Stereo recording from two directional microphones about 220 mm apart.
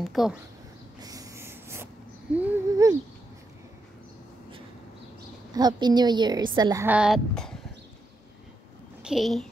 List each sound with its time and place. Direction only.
0.0 s speech: centre (ahead or behind)
1.0 s a sound: 15° right (ahead or behind)
2.3 s speech: 10° right (ahead or behind)
5.5 s a woman's voice: 20° right (ahead or behind); by 7.5 s centre (ahead or behind)
9.0 s speech: centre (ahead or behind)